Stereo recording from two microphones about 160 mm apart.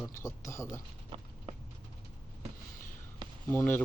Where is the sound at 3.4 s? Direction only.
15° left (ahead or behind).